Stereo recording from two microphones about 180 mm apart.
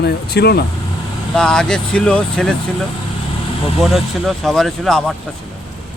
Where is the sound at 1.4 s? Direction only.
5° left (ahead or behind).